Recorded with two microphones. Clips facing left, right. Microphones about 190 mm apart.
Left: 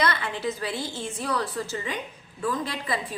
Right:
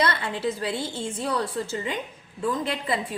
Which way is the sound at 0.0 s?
25° right (ahead or behind).